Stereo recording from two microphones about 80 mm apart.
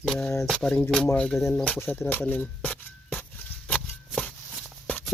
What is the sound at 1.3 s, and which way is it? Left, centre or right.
Speech, left.